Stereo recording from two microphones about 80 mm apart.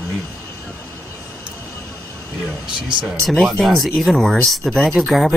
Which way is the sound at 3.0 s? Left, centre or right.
Centre.